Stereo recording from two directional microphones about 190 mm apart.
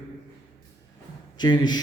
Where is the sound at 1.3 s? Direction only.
20° left (ahead or behind).